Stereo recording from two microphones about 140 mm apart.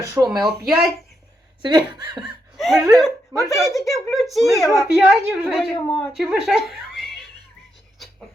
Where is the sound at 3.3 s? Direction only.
20° left (ahead or behind).